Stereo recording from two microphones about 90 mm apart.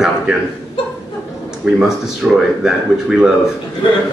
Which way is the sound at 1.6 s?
10° right (ahead or behind).